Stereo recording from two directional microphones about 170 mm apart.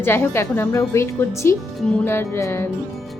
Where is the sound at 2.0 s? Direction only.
15° left (ahead or behind).